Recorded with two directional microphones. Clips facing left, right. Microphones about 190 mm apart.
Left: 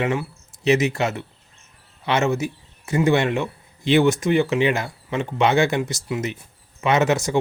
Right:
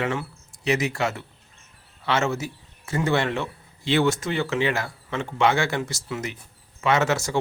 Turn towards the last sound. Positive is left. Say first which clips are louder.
# left 3 dB
turn(degrees=20)  # may be behind; listen again after turning